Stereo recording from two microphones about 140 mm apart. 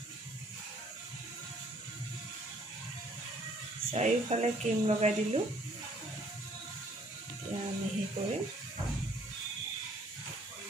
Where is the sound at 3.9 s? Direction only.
50° right (ahead or behind).